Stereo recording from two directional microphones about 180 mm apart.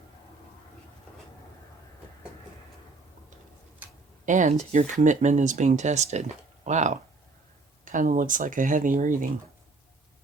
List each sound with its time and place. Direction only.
4.3 s speech: 40° right (ahead or behind)